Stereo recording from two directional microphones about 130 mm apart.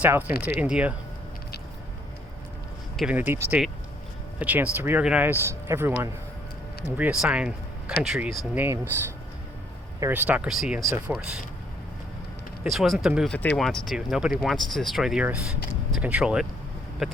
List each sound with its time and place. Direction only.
0.0 s speech: 15° right (ahead or behind)
3.0 s speech: 10° right (ahead or behind)
8.5 s speech: 15° right (ahead or behind)
10.8 s speech: 25° right (ahead or behind)
11.0 s speech: 5° right (ahead or behind)
12.7 s speech: centre (ahead or behind)